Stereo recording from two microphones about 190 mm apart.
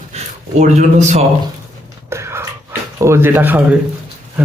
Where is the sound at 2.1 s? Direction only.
15° right (ahead or behind).